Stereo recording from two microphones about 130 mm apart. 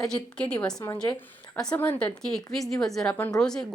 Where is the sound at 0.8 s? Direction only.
25° left (ahead or behind).